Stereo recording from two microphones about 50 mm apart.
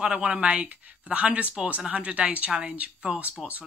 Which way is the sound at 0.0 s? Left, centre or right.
Right.